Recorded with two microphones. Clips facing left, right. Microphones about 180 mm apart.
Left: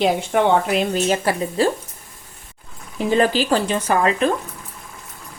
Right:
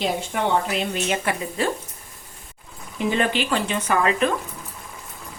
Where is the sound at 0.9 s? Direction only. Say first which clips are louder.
Left 5 dB; 35° left (ahead or behind).